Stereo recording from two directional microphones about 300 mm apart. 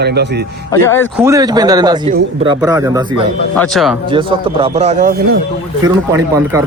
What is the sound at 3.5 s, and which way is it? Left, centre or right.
Speech, centre.